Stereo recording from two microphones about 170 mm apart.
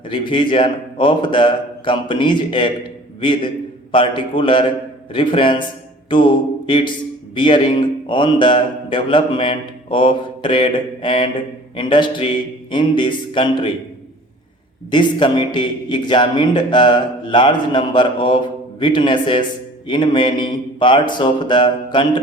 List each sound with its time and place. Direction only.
0.1 s a man's voice: 30° left (ahead or behind)
6.1 s a sound: 30° left (ahead or behind)
7.3 s a man's voice: 30° left (ahead or behind)
14.8 s a man's voice: 30° left (ahead or behind)